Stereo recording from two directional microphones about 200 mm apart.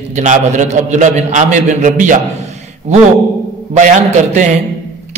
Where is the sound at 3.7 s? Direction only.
35° right (ahead or behind).